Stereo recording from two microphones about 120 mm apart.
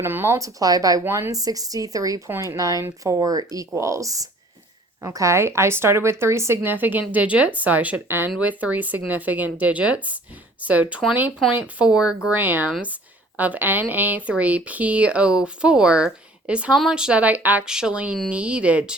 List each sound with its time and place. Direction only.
0.0 s a woman's voice: 20° right (ahead or behind)
1.0 s a woman's voice: 20° right (ahead or behind)
1.3 s a woman's voice: 30° right (ahead or behind); by 18.9 s 10° right (ahead or behind)